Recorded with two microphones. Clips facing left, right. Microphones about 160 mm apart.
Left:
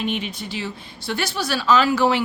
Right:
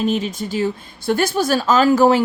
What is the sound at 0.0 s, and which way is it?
A woman's voice, 40° right (ahead or behind).